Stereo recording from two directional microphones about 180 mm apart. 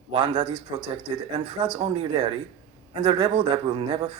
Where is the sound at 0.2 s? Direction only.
20° right (ahead or behind).